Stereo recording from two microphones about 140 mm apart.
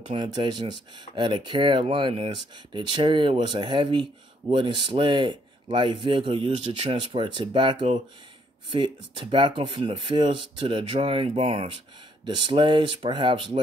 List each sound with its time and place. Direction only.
0.1 s speech: 35° right (ahead or behind)